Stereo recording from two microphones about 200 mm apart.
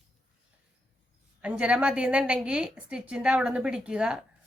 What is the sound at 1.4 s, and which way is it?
A woman's voice, 5° right (ahead or behind).